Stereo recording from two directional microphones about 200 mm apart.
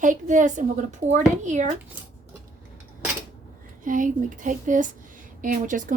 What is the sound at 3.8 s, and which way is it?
A woman's voice, 40° right (ahead or behind).